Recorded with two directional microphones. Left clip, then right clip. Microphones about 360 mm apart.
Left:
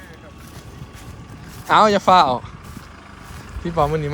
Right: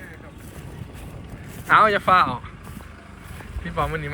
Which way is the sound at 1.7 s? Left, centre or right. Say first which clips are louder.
Left 3 dB; centre.